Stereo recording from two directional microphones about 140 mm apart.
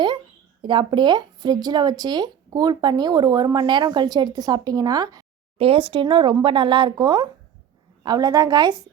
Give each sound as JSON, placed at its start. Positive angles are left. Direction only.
{"t": 0.6, "sound": "speech", "side_deg": -35}
{"t": 5.5, "sound": "speech", "side_deg": -40}